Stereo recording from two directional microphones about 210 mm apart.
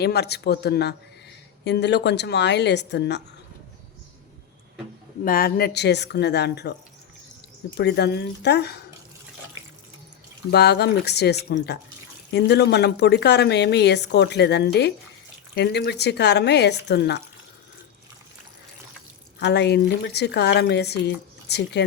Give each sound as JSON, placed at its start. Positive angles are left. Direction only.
{"t": 0.0, "sound": "a woman's voice", "side_deg": 50}
{"t": 5.2, "sound": "a woman's voice", "side_deg": 45}
{"t": 7.8, "sound": "a woman's voice", "side_deg": 50}
{"t": 10.5, "sound": "a woman's voice", "side_deg": 50}
{"t": 19.4, "sound": "a woman's voice", "side_deg": 55}